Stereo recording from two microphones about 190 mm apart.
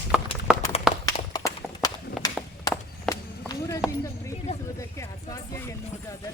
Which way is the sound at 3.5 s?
15° left (ahead or behind).